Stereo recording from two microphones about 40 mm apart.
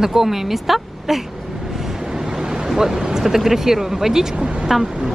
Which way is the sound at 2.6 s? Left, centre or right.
Centre.